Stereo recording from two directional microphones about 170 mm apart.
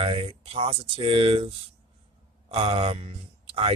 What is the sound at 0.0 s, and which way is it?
Speech, 35° right (ahead or behind).